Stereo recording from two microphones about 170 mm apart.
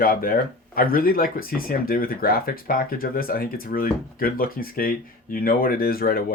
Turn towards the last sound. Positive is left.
turn(degrees=60)  # may be behind; listen again after turning